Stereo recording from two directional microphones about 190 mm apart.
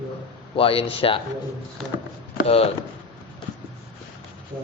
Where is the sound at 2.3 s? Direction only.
30° left (ahead or behind).